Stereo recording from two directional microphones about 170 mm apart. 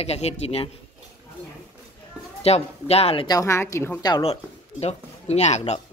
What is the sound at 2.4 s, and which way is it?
Speech, 35° left (ahead or behind).